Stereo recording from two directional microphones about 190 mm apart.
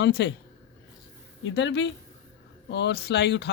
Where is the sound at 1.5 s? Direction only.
75° left (ahead or behind).